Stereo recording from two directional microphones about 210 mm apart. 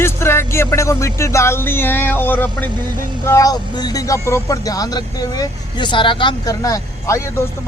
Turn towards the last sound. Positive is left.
turn(degrees=15)  # may be behind; listen again after turning